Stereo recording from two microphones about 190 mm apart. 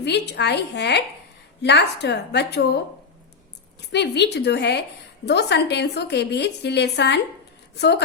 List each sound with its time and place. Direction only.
0.0 s a woman's voice: 60° left (ahead or behind)